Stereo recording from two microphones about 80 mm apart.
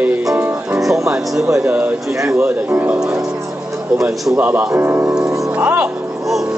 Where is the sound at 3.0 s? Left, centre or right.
Right.